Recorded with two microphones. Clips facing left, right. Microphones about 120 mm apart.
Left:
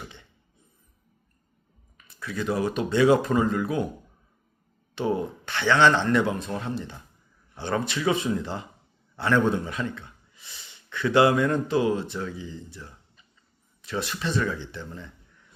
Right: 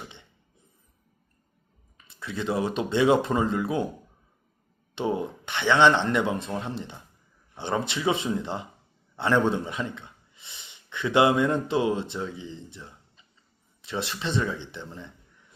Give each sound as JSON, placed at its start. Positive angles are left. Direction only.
{"t": 2.0, "sound": "speech", "side_deg": -25}
{"t": 4.9, "sound": "a man's voice", "side_deg": -25}